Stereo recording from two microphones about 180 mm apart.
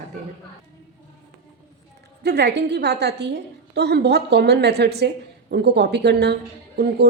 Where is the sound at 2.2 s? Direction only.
70° right (ahead or behind).